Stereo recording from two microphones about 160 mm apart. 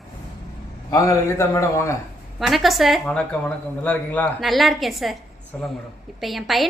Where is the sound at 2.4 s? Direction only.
Centre (ahead or behind).